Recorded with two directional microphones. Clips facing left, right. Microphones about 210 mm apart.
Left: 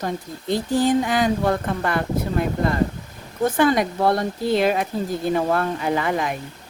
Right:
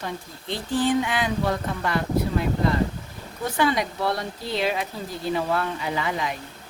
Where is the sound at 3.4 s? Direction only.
50° left (ahead or behind).